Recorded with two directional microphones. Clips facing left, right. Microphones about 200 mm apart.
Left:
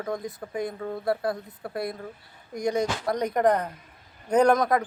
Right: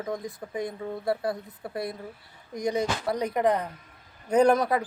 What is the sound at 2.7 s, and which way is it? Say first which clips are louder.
Speech: left 1 dB; 10° right (ahead or behind).